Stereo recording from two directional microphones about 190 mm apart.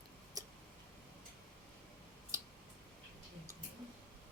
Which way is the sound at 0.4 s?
20° right (ahead or behind).